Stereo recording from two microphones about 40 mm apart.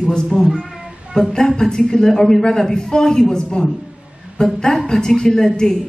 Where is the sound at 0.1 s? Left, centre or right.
Centre.